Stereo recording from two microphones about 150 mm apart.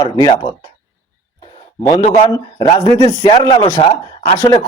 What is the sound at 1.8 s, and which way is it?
A man's voice, 25° left (ahead or behind).